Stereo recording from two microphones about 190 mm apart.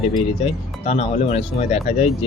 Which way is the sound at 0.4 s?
30° left (ahead or behind).